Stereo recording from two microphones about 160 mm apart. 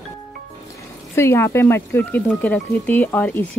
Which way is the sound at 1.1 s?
15° left (ahead or behind).